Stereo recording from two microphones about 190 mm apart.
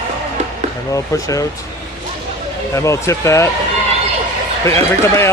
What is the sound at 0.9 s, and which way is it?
Speech, 15° left (ahead or behind).